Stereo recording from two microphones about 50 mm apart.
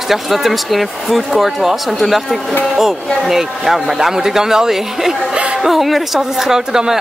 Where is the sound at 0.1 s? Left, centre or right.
Centre.